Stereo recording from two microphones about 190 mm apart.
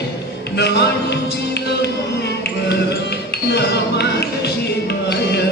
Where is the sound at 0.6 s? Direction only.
60° left (ahead or behind).